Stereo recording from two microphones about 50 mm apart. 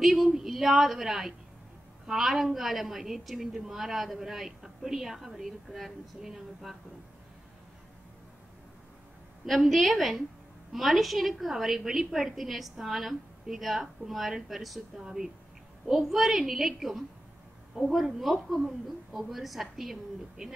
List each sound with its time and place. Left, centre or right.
0.0 s a woman's voice: centre
9.5 s a woman's voice: centre